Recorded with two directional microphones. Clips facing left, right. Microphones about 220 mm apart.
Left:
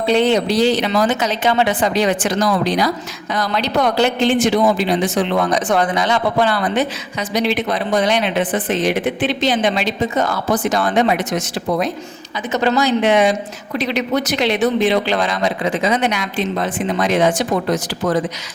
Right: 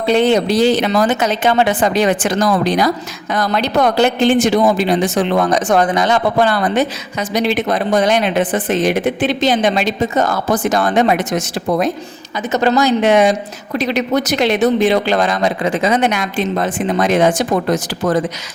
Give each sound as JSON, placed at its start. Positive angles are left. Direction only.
{"t": 0.1, "sound": "speech", "side_deg": -50}